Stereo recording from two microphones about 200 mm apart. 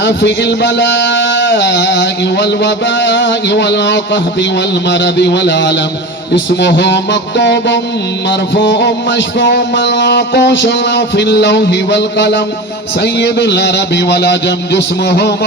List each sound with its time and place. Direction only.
0.0 s speech: 60° left (ahead or behind)